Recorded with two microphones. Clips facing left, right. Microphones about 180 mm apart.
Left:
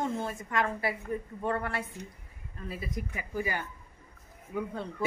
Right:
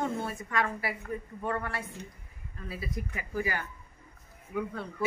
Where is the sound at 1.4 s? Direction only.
30° left (ahead or behind).